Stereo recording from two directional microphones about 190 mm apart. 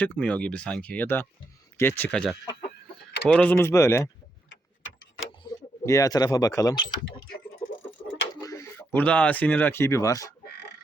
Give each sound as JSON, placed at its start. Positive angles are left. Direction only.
{"t": 0.0, "sound": "speech", "side_deg": 5}
{"t": 5.5, "sound": "a sound", "side_deg": 20}
{"t": 5.8, "sound": "speech", "side_deg": 15}
{"t": 8.3, "sound": "speech", "side_deg": 20}